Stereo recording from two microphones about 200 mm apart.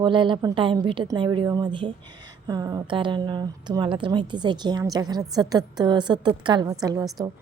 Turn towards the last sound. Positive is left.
turn(degrees=-20)  # may be behind; listen again after turning